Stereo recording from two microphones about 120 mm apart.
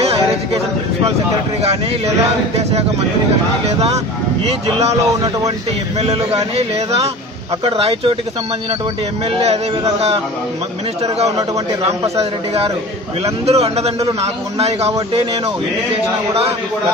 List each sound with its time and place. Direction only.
3.6 s a man's voice: 60° right (ahead or behind)
12.2 s a man's voice: 55° right (ahead or behind)